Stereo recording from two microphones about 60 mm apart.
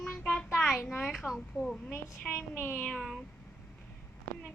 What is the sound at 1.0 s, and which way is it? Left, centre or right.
A woman's voice, centre.